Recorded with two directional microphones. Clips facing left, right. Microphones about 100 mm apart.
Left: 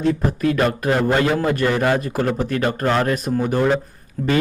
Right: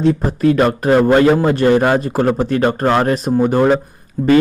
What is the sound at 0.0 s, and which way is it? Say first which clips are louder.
Speech: right 5 dB; 30° right (ahead or behind).